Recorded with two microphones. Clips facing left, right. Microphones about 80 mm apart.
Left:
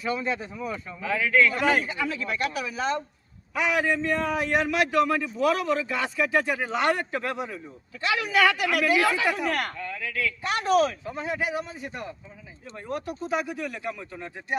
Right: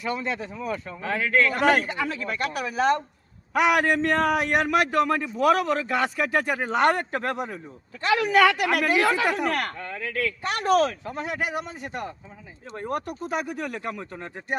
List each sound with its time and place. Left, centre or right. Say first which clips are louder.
0.0 s a man's voice: even; right
3.5 s a man's voice: right 4 dB; right